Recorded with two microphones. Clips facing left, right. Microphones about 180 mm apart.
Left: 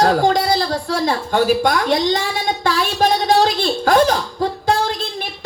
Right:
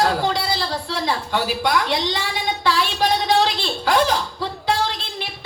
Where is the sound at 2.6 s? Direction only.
45° left (ahead or behind).